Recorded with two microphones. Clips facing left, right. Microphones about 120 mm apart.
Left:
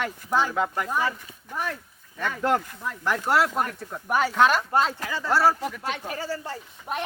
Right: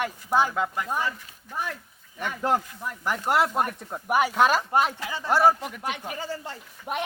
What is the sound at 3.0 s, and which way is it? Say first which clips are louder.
Speech: left 1 dB; 15° right (ahead or behind).